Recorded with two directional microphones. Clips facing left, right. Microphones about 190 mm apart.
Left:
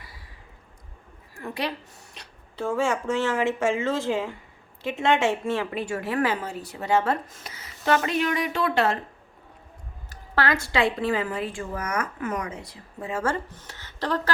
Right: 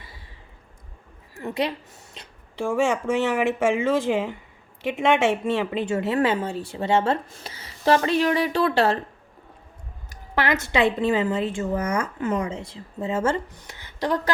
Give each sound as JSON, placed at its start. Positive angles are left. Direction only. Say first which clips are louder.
{"t": 1.4, "sound": "a woman's voice", "louder": "right 4 dB", "side_deg": -20}
{"t": 10.1, "sound": "a woman's voice", "louder": "right 1 dB", "side_deg": -20}